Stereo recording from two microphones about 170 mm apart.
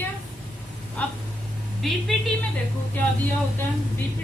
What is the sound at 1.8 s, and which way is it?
Speech, 5° left (ahead or behind).